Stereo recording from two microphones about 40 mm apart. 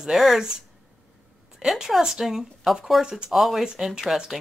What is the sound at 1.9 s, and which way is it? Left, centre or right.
Speech, centre.